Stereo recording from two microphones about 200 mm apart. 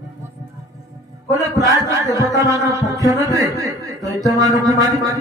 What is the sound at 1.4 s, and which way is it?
Speech, 15° right (ahead or behind).